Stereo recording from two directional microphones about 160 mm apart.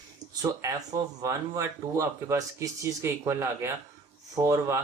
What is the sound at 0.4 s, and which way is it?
Speech, 20° right (ahead or behind).